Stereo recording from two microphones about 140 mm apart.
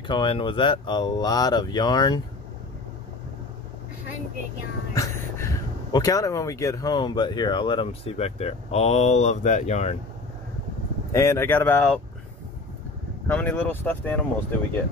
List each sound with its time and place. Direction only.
0.0 s speech: 35° left (ahead or behind)
4.9 s speech: 25° left (ahead or behind); by 9.9 s 55° left (ahead or behind)
11.1 s speech: 20° left (ahead or behind)
13.3 s speech: 10° left (ahead or behind)